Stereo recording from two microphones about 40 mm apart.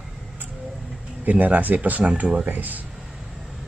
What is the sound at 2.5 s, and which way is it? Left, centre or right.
Speech, right.